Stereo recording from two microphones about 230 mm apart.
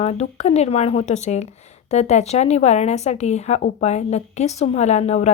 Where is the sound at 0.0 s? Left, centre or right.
Left.